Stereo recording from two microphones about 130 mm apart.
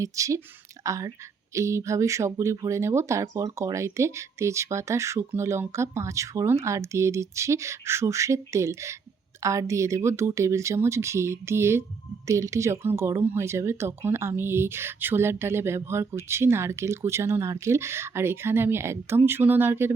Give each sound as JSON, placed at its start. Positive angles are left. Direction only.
{"t": 0.0, "sound": "speech", "side_deg": -25}